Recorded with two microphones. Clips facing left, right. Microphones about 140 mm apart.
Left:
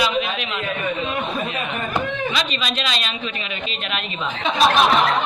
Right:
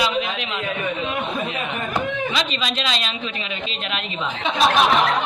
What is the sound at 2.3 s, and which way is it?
Speech, 25° right (ahead or behind).